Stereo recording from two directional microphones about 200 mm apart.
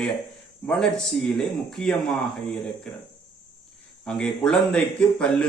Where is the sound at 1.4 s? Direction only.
Centre (ahead or behind).